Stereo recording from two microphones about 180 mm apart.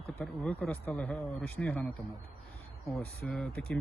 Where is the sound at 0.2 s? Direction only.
5° left (ahead or behind).